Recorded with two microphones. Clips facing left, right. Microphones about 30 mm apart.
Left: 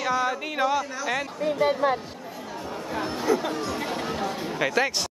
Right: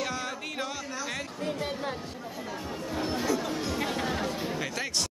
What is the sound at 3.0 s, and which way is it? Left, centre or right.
Chatter, centre.